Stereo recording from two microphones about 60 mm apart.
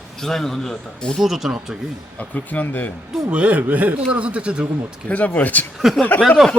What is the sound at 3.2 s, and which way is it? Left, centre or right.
A man's voice, centre.